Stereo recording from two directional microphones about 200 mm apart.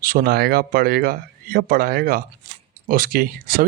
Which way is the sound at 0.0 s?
45° right (ahead or behind).